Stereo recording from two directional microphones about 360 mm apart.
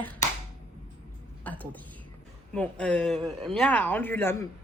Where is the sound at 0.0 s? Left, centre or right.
Centre.